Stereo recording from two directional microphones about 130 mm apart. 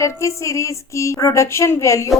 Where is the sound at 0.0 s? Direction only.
20° left (ahead or behind).